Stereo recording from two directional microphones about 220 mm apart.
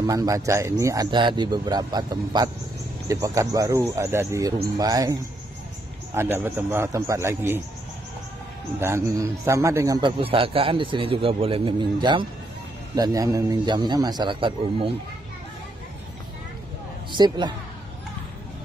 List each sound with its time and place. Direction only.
0.0 s a man's voice: 15° right (ahead or behind)
8.7 s a man's voice: 10° right (ahead or behind)
17.1 s a man's voice: 20° right (ahead or behind)